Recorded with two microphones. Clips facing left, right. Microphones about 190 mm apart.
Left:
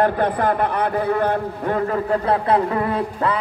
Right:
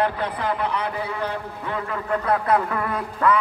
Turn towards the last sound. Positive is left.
turn(degrees=30)  # may be behind; listen again after turning